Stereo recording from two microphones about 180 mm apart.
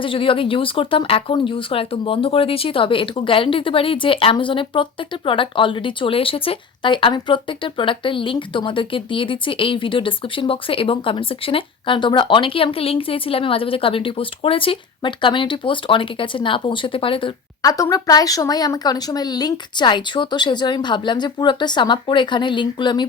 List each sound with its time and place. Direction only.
0.0 s speech: 30° left (ahead or behind)